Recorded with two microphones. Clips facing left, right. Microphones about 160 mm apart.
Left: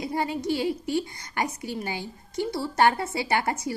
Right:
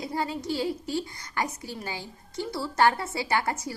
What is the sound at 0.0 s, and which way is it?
A woman's voice, 20° left (ahead or behind).